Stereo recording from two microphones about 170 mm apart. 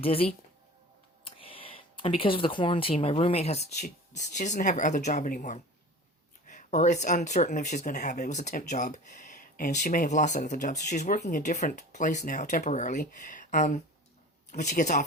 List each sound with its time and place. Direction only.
0.0 s speech: 35° left (ahead or behind)